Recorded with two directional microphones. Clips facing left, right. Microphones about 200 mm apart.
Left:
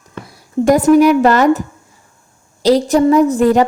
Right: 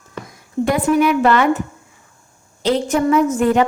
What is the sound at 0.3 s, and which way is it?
Speech, 40° left (ahead or behind).